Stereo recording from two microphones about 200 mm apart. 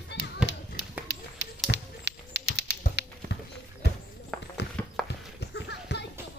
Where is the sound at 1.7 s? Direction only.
55° right (ahead or behind).